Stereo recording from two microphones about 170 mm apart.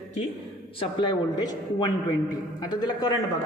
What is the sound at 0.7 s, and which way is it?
Speech, 30° left (ahead or behind).